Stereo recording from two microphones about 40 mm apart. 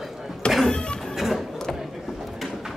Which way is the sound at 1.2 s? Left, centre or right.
Centre.